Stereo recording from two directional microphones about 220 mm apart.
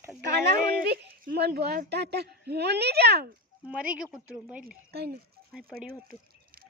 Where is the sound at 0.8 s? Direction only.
50° right (ahead or behind).